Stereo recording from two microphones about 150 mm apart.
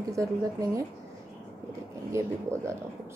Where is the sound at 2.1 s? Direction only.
20° right (ahead or behind).